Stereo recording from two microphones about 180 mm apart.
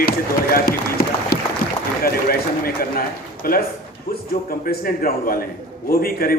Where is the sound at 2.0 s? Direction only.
55° left (ahead or behind).